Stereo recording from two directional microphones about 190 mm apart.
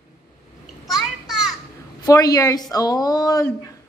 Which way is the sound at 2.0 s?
20° left (ahead or behind).